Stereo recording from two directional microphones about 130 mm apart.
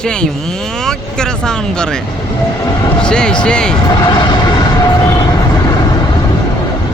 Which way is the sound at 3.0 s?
5° left (ahead or behind).